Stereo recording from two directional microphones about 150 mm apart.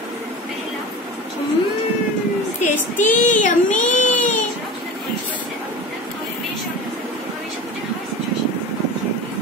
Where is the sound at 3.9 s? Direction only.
55° left (ahead or behind).